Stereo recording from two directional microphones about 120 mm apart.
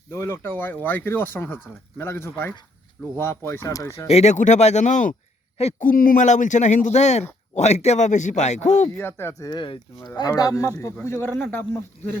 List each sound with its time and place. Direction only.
0.1 s speech: 25° left (ahead or behind)
4.1 s speech: 70° left (ahead or behind); by 5.1 s 90° left
5.5 s a man's voice: 75° left (ahead or behind)
9.0 s speech: 20° left (ahead or behind)
9.5 s speech: 45° left (ahead or behind)
10.2 s speech: 30° left (ahead or behind)